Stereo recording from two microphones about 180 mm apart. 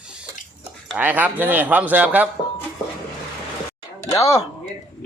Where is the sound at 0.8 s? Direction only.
10° right (ahead or behind).